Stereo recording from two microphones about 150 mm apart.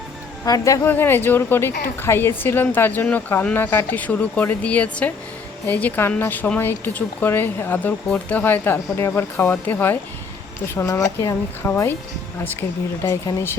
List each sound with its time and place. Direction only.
0.4 s speech: 25° left (ahead or behind)
13.1 s speech: 25° left (ahead or behind)